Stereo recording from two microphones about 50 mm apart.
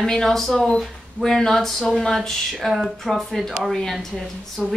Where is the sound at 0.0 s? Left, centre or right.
Centre.